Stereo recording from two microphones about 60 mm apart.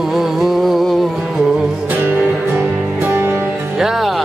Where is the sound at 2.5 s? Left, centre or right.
Right.